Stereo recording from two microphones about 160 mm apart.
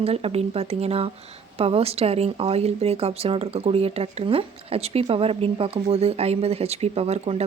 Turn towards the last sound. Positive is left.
turn(degrees=-40)  # may be behind; listen again after turning